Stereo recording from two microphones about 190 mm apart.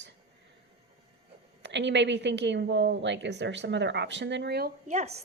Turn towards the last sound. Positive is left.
turn(degrees=-35)  # may be behind; listen again after turning